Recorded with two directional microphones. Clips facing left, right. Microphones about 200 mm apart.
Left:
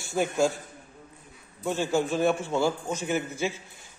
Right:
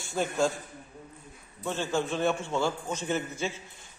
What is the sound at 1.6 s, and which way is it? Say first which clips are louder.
A man's voice: left 4 dB; 10° left (ahead or behind).